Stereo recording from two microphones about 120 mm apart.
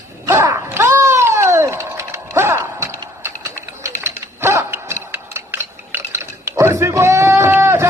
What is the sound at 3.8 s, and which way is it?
Mechanisms, 20° right (ahead or behind).